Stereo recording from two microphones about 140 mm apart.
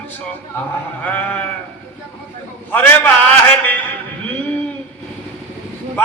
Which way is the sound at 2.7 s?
10° left (ahead or behind).